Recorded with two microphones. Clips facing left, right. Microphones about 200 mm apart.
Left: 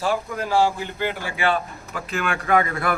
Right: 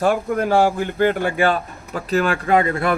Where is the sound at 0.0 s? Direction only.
55° right (ahead or behind).